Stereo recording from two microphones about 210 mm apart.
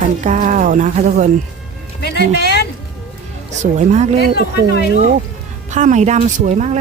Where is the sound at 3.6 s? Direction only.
35° right (ahead or behind).